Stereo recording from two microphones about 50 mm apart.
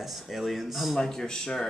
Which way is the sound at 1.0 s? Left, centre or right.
Centre.